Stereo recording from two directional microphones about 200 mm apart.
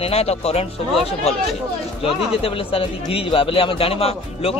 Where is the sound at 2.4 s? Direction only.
30° left (ahead or behind).